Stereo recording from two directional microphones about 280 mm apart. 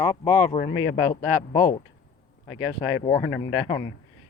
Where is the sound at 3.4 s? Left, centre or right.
Centre.